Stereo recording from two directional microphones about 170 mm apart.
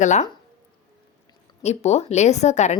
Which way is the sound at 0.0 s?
45° left (ahead or behind).